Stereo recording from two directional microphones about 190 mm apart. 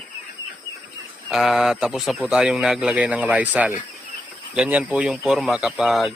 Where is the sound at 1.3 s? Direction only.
Centre (ahead or behind).